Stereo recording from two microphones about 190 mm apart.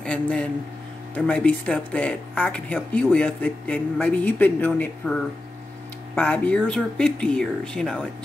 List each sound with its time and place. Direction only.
0.0 s a man's voice: 5° left (ahead or behind)